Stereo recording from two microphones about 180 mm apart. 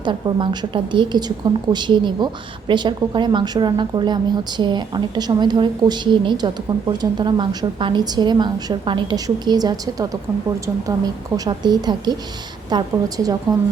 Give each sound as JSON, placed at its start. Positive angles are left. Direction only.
{"t": 0.0, "sound": "a woman's voice", "side_deg": -25}